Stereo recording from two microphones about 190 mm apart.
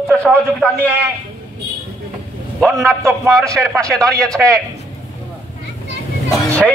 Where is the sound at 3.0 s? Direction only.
15° right (ahead or behind).